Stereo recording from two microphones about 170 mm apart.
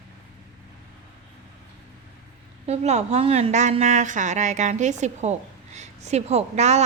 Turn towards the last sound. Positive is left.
turn(degrees=-40)  # may be behind; listen again after turning